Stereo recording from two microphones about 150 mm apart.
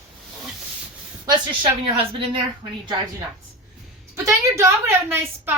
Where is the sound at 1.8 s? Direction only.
35° right (ahead or behind).